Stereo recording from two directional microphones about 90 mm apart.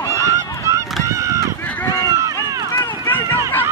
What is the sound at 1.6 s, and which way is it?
Run, 15° left (ahead or behind).